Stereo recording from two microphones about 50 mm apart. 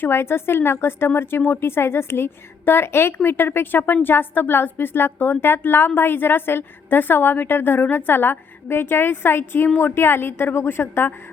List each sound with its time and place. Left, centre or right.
0.0 s a woman's voice: left